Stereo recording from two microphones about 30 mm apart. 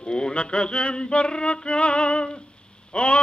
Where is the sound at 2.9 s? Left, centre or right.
Left.